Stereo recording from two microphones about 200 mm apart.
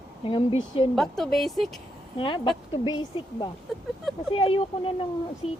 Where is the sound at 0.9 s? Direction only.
Centre (ahead or behind).